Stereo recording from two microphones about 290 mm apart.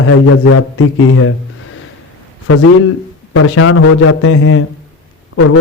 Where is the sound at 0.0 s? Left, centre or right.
Left.